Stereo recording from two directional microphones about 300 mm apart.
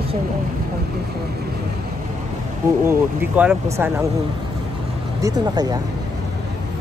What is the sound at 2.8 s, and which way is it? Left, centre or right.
Speech, centre.